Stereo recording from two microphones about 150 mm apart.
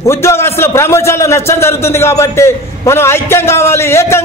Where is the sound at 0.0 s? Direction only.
15° left (ahead or behind).